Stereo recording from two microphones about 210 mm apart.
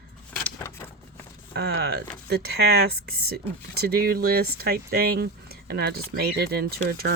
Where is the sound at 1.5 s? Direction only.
50° right (ahead or behind).